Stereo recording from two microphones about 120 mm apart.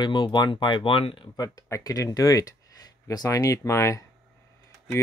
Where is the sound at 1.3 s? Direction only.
30° left (ahead or behind).